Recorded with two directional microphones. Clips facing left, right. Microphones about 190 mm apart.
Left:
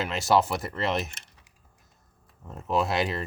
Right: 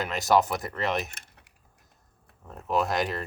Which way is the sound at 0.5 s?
Centre (ahead or behind).